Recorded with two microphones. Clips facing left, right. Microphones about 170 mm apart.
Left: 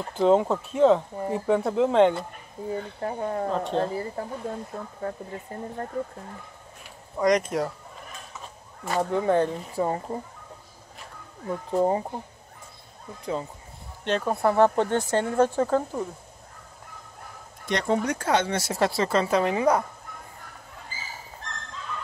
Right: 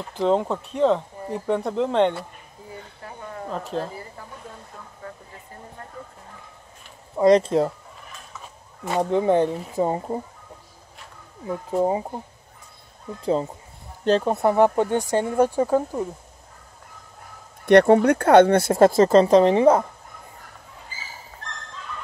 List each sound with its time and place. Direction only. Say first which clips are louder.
0.1 s speech: left 1 dB; centre (ahead or behind)
2.7 s speech: left 10 dB; 40° left (ahead or behind)
3.5 s speech: right 1 dB; centre (ahead or behind)
4.7 s speech: left 8 dB; 40° left (ahead or behind)
7.2 s speech: right 6 dB; 30° right (ahead or behind)
8.8 s speech: right 3 dB; 20° right (ahead or behind)
11.4 s speech: right 1 dB; 10° right (ahead or behind)
13.2 s speech: right 7 dB; 30° right (ahead or behind); by 16.1 s 10° right (ahead or behind)
17.6 s speech: right 11 dB; 60° right (ahead or behind); by 19.8 s 30° right (ahead or behind)